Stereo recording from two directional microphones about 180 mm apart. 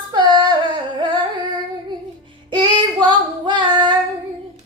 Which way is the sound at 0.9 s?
25° right (ahead or behind).